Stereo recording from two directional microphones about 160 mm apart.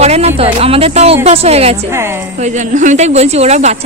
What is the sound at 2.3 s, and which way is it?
A woman's voice, 50° right (ahead or behind).